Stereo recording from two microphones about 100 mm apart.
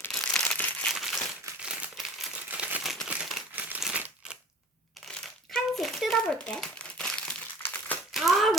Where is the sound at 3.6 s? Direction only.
15° right (ahead or behind).